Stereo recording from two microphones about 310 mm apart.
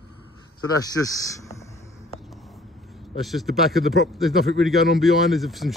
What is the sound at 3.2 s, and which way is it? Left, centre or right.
Speech, centre.